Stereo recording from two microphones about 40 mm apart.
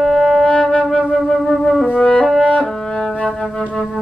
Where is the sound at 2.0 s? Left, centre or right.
Left.